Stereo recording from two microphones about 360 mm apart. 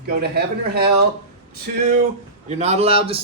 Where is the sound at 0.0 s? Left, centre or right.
Right.